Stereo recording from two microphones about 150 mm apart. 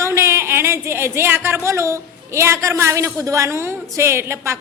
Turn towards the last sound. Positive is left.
turn(degrees=-20)  # may be behind; listen again after turning